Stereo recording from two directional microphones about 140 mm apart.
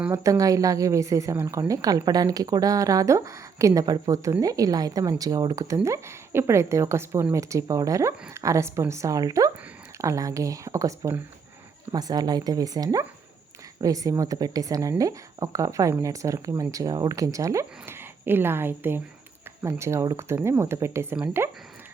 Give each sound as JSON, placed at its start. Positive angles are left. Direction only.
{"t": 0.1, "sound": "a woman's voice", "side_deg": -25}